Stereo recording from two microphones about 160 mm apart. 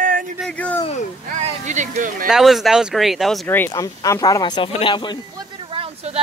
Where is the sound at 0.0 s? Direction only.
60° right (ahead or behind).